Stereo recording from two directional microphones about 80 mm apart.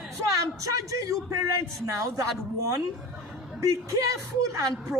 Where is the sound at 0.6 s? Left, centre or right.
Right.